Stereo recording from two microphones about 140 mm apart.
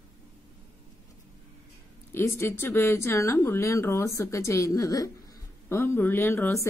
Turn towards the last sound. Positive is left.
turn(degrees=15)  # may be behind; listen again after turning